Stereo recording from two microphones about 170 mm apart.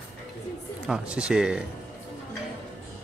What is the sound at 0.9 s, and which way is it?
Speech, 5° right (ahead or behind).